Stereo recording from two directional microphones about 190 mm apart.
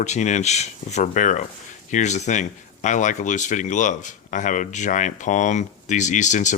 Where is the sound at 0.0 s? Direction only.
40° left (ahead or behind).